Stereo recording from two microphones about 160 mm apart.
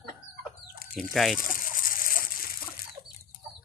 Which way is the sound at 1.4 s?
60° left (ahead or behind).